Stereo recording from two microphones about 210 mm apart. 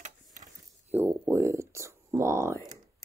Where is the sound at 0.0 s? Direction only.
35° right (ahead or behind).